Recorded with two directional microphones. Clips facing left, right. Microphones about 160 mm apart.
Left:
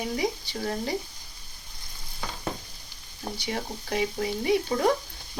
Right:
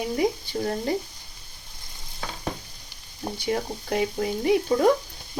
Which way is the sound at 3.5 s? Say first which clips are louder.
Right 5 dB; 50° right (ahead or behind).